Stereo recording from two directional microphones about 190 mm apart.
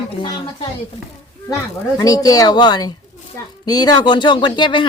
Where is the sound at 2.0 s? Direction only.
20° left (ahead or behind).